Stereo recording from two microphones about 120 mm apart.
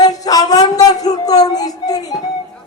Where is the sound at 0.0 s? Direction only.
30° left (ahead or behind).